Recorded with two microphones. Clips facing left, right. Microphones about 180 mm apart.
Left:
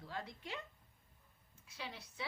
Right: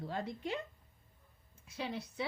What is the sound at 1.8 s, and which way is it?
Speech, 50° right (ahead or behind).